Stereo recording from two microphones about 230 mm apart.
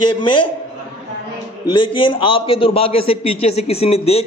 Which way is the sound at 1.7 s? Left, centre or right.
Left.